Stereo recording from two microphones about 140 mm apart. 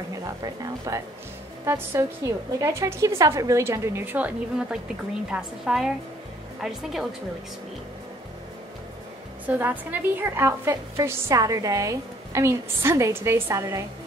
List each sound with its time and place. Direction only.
0.4 s a woman's voice: 25° right (ahead or behind); by 7.2 s centre (ahead or behind)
9.5 s a woman's voice: 10° right (ahead or behind)